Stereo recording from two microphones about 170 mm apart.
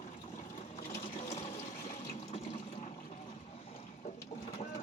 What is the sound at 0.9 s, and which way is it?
Water, 40° left (ahead or behind).